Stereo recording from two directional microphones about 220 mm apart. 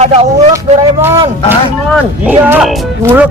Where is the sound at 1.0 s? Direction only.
10° right (ahead or behind).